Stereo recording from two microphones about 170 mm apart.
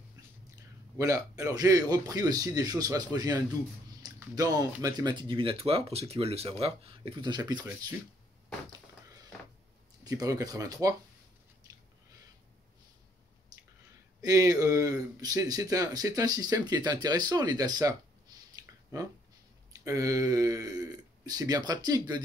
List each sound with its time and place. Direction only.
0.9 s speech: 20° right (ahead or behind)
4.0 s a sound: 20° right (ahead or behind)
4.8 s speech: 25° right (ahead or behind)
10.0 s speech: 20° right (ahead or behind)
14.2 s speech: 20° right (ahead or behind)